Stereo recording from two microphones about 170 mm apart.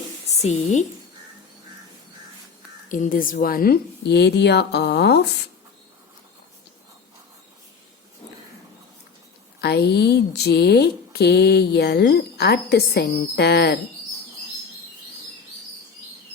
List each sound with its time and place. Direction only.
0.4 s a woman's voice: 45° left (ahead or behind)
2.9 s speech: 50° left (ahead or behind); by 5.5 s 75° left (ahead or behind)
9.6 s speech: 75° left (ahead or behind)